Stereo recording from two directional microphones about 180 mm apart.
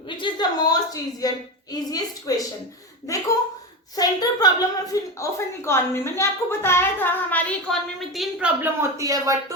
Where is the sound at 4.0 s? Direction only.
20° left (ahead or behind); by 8.5 s centre (ahead or behind).